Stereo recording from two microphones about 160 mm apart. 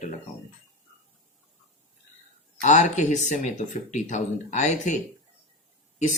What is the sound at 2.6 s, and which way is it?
Speech, 50° left (ahead or behind).